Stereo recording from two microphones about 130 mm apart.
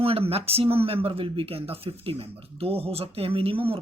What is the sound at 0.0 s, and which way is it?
Speech, 50° right (ahead or behind).